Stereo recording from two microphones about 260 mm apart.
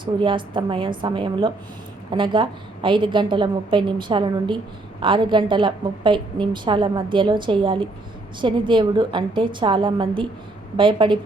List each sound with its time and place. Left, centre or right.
0.0 s a woman's voice: centre